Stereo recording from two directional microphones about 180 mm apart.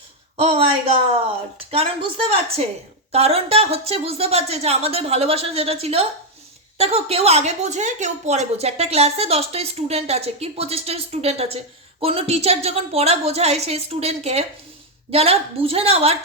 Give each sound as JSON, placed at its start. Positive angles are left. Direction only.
{"t": 0.3, "sound": "speech", "side_deg": -35}
{"t": 1.7, "sound": "a woman's voice", "side_deg": -35}